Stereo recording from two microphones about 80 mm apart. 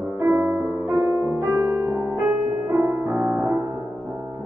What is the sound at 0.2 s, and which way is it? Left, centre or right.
Music, right.